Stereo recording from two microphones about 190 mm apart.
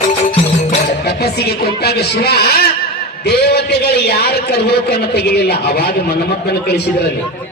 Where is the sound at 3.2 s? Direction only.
60° left (ahead or behind).